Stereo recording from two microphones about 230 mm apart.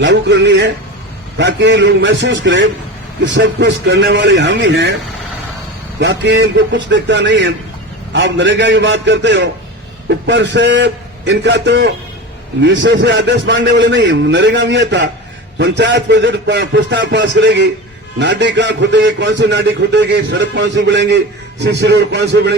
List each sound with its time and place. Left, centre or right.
0.0 s a man's voice: right
6.0 s a man's voice: right